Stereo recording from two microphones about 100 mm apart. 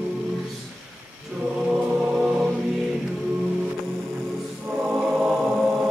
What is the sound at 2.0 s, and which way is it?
Music, 15° right (ahead or behind).